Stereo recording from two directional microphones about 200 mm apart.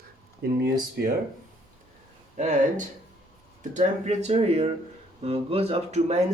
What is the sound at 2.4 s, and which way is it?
Speech, 35° right (ahead or behind).